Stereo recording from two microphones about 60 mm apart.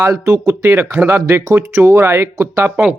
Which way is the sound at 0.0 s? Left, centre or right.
Right.